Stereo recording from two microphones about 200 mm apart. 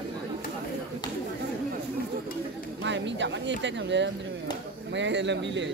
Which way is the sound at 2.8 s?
65° right (ahead or behind).